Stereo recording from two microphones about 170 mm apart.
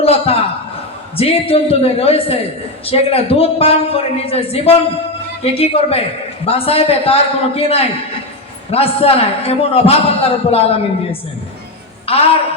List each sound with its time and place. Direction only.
0.0 s a man's voice: 35° left (ahead or behind)